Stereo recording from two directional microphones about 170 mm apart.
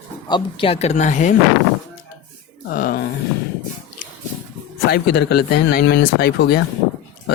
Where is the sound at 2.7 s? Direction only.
60° left (ahead or behind).